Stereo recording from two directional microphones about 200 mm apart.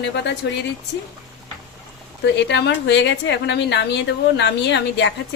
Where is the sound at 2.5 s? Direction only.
60° left (ahead or behind).